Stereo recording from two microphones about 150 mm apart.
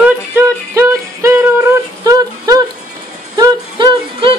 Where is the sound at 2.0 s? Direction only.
25° right (ahead or behind).